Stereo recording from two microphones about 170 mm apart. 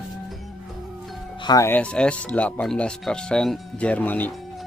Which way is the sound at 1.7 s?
5° left (ahead or behind).